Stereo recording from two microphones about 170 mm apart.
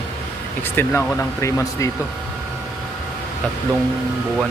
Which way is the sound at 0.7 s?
15° left (ahead or behind).